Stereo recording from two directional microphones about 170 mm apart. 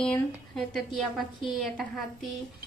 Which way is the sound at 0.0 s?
5° left (ahead or behind).